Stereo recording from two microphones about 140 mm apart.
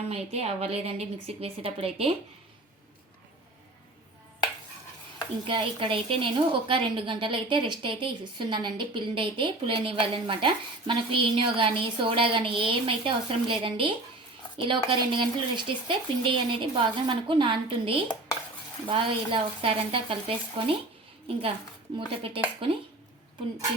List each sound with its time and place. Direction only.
0.0 s a woman's voice: 50° right (ahead or behind)
5.5 s a woman's voice: 35° right (ahead or behind)
21.9 s a woman's voice: 40° right (ahead or behind)